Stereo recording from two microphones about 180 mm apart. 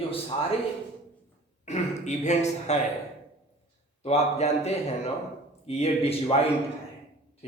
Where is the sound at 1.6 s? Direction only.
40° left (ahead or behind).